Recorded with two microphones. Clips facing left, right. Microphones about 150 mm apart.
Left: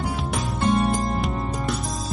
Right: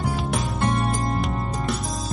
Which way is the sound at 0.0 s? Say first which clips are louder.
Right 1 dB; centre (ahead or behind).